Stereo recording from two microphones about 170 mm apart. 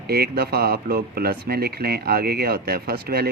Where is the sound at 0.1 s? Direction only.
65° right (ahead or behind).